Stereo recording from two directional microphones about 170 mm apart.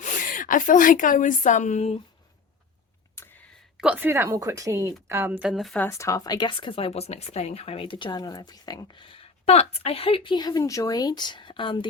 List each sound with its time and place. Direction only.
0.0 s a woman's voice: 50° left (ahead or behind)
3.8 s a woman's voice: 10° right (ahead or behind)
5.8 s speech: 15° left (ahead or behind)